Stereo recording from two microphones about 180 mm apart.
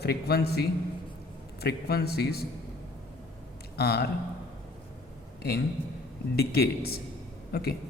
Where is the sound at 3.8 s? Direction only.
60° left (ahead or behind).